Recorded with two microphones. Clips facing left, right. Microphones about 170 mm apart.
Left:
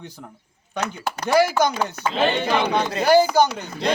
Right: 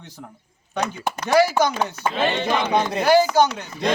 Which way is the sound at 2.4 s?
20° right (ahead or behind).